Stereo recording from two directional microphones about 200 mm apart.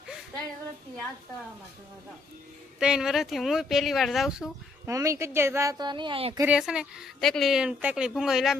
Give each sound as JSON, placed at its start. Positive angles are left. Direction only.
{"t": 2.7, "sound": "a woman's voice", "side_deg": -5}
{"t": 4.9, "sound": "speech", "side_deg": -15}
{"t": 6.4, "sound": "a woman's voice", "side_deg": -5}